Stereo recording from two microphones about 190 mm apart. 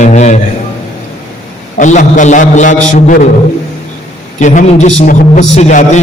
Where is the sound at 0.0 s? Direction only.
40° left (ahead or behind).